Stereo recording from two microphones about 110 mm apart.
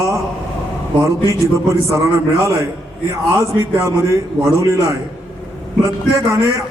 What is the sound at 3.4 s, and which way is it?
A man's voice, 30° right (ahead or behind).